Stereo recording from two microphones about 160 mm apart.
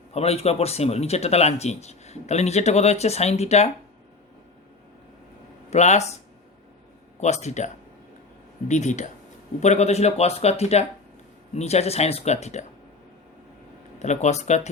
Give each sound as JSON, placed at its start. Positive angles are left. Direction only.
{"t": 0.1, "sound": "speech", "side_deg": 40}
{"t": 5.7, "sound": "speech", "side_deg": 45}
{"t": 7.2, "sound": "speech", "side_deg": 45}
{"t": 14.0, "sound": "speech", "side_deg": 45}